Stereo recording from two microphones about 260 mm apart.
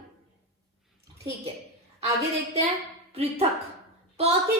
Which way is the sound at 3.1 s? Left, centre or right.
Right.